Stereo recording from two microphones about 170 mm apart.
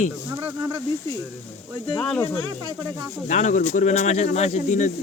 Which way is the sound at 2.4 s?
25° right (ahead or behind).